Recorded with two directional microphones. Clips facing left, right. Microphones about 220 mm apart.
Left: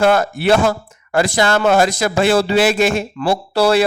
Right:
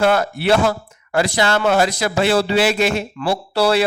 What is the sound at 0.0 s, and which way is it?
Speech, 45° left (ahead or behind).